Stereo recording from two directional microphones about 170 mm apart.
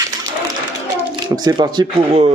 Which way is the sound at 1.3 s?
25° right (ahead or behind).